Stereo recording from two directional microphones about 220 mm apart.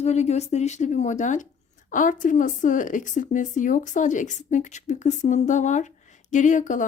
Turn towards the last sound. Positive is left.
turn(degrees=35)  # may be behind; listen again after turning